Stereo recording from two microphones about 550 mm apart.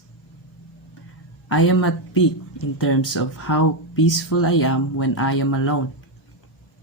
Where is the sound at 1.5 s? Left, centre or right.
Left.